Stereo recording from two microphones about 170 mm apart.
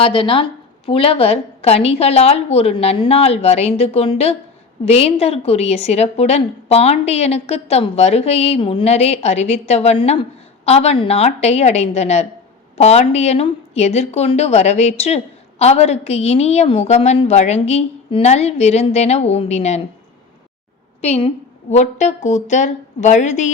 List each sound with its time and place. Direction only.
0.0 s speech: 30° left (ahead or behind)
21.0 s a woman's voice: 40° left (ahead or behind)